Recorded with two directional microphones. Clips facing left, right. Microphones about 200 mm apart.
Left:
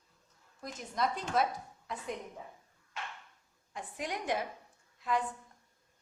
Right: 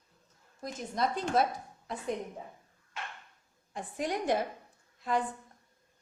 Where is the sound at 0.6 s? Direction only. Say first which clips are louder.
Right 2 dB; 30° right (ahead or behind).